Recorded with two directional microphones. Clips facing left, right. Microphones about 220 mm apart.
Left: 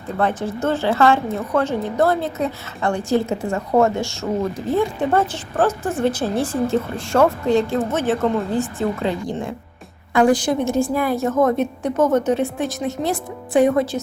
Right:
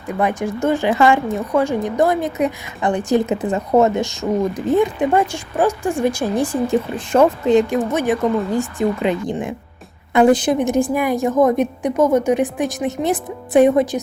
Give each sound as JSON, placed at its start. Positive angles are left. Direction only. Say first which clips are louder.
{"t": 0.1, "sound": "a woman's voice", "louder": "right 2 dB", "side_deg": -15}